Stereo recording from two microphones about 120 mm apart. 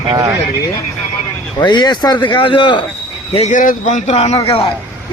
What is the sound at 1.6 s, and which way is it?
Speech, 40° left (ahead or behind).